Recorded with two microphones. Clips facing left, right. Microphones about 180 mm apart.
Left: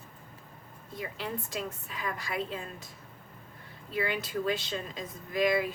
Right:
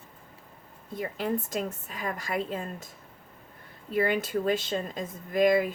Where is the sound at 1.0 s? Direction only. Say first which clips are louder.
Right 7 dB; 50° right (ahead or behind).